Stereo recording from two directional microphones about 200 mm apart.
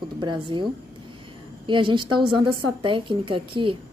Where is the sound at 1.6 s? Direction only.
25° right (ahead or behind).